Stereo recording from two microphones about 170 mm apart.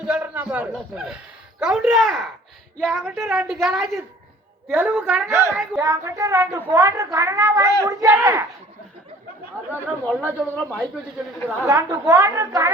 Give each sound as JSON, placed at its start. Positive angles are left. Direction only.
{"t": 0.0, "sound": "a woman's voice", "side_deg": -5}
{"t": 10.1, "sound": "speech", "side_deg": 10}
{"t": 11.4, "sound": "a woman's voice", "side_deg": -15}